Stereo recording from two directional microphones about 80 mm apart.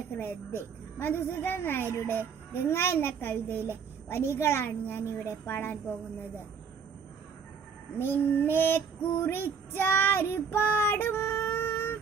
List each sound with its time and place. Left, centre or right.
0.1 s female singing: left
7.9 s female singing: left